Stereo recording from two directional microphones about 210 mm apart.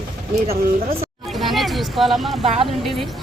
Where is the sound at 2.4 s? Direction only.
25° right (ahead or behind).